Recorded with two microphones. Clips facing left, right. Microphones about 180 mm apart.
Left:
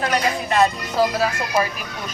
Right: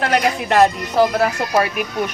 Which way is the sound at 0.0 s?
65° right (ahead or behind).